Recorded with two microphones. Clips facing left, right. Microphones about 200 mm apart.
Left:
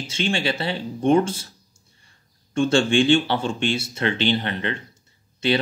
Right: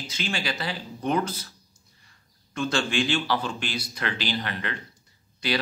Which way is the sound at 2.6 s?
30° left (ahead or behind).